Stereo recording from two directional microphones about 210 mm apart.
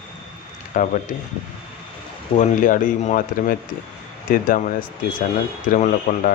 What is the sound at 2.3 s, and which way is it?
Speech, 40° left (ahead or behind).